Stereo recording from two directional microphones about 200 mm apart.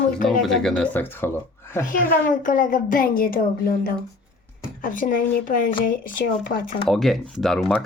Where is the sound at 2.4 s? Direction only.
45° left (ahead or behind).